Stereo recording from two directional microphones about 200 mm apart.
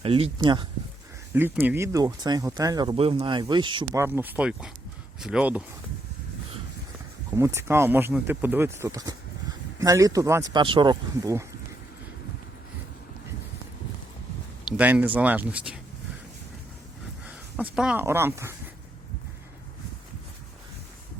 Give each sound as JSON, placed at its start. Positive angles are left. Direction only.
{"t": 0.0, "sound": "speech", "side_deg": -30}
{"t": 1.3, "sound": "speech", "side_deg": -10}
{"t": 4.0, "sound": "speech", "side_deg": -10}
{"t": 7.3, "sound": "speech", "side_deg": -10}
{"t": 14.6, "sound": "speech", "side_deg": -5}
{"t": 17.2, "sound": "speech", "side_deg": -5}